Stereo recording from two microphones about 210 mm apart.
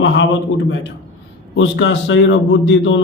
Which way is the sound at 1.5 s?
60° left (ahead or behind).